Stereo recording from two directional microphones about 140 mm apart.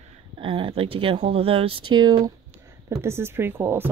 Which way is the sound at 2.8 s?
20° right (ahead or behind).